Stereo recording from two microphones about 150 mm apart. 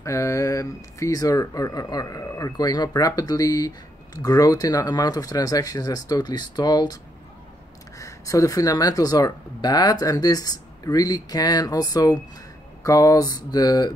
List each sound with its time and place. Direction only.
0.0 s speech: 20° left (ahead or behind)
8.0 s speech: 20° left (ahead or behind)